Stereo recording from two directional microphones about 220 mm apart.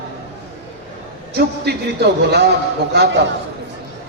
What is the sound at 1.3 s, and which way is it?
A man's voice, 50° right (ahead or behind).